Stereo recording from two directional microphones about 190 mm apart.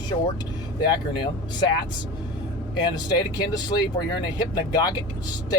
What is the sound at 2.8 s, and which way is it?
Speech, 20° left (ahead or behind).